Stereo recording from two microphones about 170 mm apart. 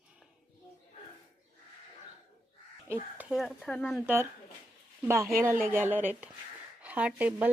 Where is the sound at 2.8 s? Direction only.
10° right (ahead or behind).